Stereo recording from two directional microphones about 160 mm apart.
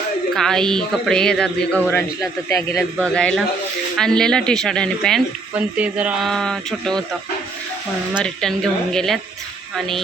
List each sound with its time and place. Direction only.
0.3 s speech: 5° left (ahead or behind)
1.9 s a man's voice: 20° left (ahead or behind)
2.6 s speech: 5° left (ahead or behind)
5.5 s speech: 10° right (ahead or behind)
8.2 s speech: 5° left (ahead or behind)